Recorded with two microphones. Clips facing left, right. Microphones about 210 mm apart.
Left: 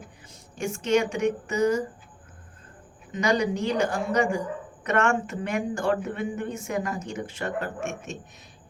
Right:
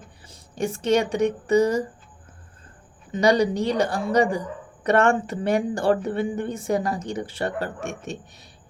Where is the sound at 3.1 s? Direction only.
35° right (ahead or behind).